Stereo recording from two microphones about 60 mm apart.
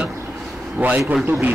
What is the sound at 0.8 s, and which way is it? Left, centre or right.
Speech, right.